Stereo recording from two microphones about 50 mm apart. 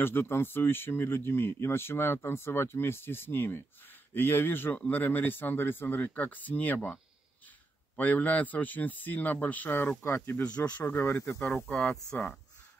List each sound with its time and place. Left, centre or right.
0.0 s speech: left
4.7 s speech: left
9.7 s speech: left
10.8 s speech: left
11.8 s speech: centre